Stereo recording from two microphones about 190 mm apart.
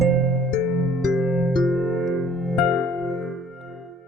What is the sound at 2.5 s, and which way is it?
Music, 5° left (ahead or behind).